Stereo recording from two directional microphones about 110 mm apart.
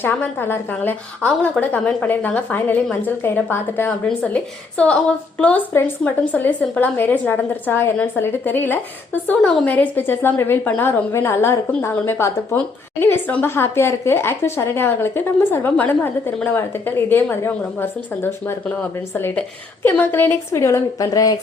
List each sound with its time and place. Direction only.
0.0 s a woman's voice: 20° left (ahead or behind); by 21.3 s 35° left (ahead or behind)